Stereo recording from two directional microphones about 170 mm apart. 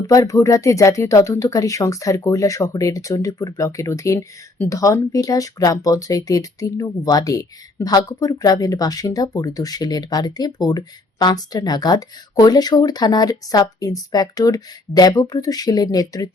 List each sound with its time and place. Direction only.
0.1 s speech: 20° left (ahead or behind)